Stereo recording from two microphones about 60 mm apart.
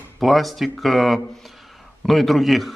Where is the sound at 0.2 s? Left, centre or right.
Centre.